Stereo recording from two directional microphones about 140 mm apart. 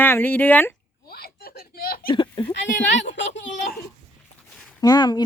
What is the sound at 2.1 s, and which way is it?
Sheep, 35° left (ahead or behind).